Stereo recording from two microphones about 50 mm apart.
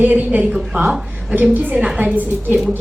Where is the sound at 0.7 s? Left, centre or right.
Right.